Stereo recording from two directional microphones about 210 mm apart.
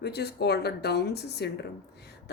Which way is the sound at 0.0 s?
50° left (ahead or behind).